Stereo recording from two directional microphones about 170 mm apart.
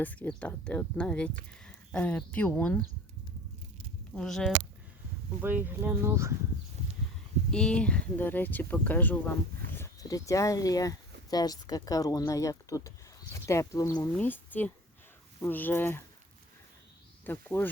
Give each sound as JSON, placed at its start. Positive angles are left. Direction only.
{"t": 0.0, "sound": "speech", "side_deg": 10}
{"t": 4.1, "sound": "speech", "side_deg": 5}
{"t": 5.4, "sound": "speech", "side_deg": -10}
{"t": 7.5, "sound": "speech", "side_deg": 5}
{"t": 17.2, "sound": "speech", "side_deg": 10}